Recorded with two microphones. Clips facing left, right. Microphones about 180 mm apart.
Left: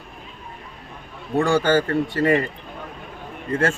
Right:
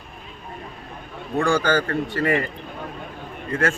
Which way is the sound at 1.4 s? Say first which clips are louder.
Left 2 dB; 20° left (ahead or behind).